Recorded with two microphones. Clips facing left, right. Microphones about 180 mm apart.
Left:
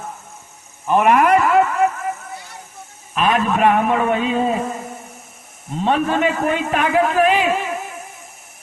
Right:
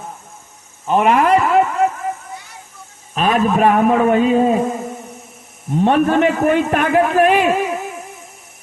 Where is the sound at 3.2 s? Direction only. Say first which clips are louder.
Right 2 dB; 40° right (ahead or behind).